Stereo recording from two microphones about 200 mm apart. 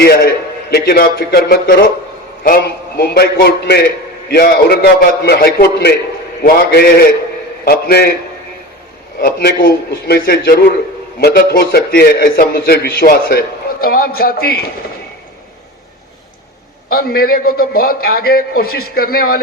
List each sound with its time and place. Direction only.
0.0 s a man's voice: 50° left (ahead or behind)
9.1 s a man's voice: 50° left (ahead or behind)
16.9 s a man's voice: 50° left (ahead or behind)